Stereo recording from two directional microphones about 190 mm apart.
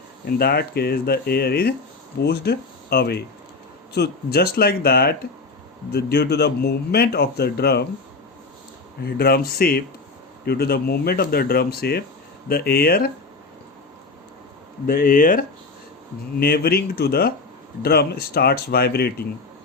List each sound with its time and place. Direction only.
0.3 s speech: 55° left (ahead or behind)
9.0 s speech: 55° left (ahead or behind)
14.8 s speech: 50° left (ahead or behind)
16.4 s speech: 55° left (ahead or behind)